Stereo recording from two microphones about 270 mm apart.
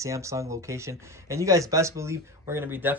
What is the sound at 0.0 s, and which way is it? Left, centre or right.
Speech, centre.